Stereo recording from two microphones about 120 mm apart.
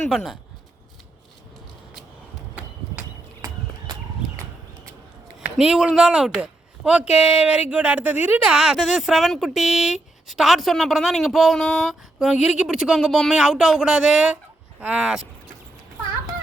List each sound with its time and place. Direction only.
0.1 s speech: centre (ahead or behind)
3.4 s horse: 25° right (ahead or behind)
5.5 s speech: 5° right (ahead or behind)